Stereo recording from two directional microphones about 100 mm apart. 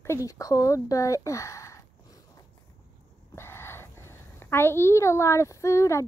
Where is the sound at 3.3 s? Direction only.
25° left (ahead or behind).